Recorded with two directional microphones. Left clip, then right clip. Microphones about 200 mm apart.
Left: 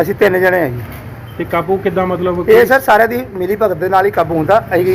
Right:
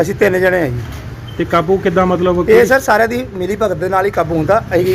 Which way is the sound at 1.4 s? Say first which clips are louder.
Right 2 dB; 50° right (ahead or behind).